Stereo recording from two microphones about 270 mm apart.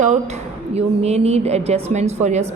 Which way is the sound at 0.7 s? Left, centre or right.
Right.